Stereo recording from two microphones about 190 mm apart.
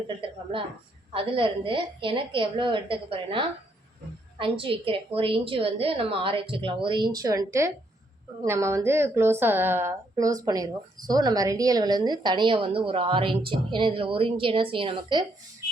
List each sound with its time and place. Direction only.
0.2 s a woman's voice: 25° right (ahead or behind)